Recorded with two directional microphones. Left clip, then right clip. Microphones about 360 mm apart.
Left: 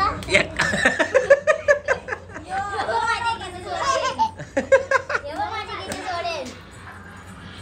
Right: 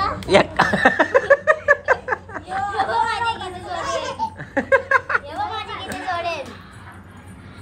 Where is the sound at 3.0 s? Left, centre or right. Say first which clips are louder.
Right 1 dB; centre.